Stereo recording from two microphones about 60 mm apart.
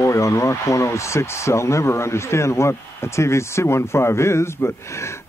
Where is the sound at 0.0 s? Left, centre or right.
Left.